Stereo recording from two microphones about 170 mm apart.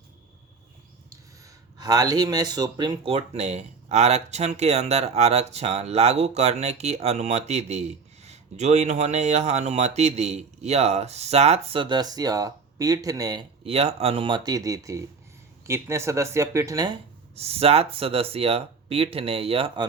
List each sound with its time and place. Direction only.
1.8 s speech: 25° right (ahead or behind)
13.7 s speech: 35° right (ahead or behind)
17.3 s speech: 35° right (ahead or behind)